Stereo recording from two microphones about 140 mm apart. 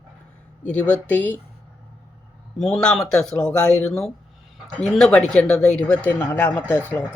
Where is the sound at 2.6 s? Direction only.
5° left (ahead or behind).